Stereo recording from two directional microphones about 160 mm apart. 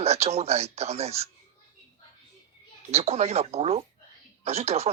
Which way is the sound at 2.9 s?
40° right (ahead or behind).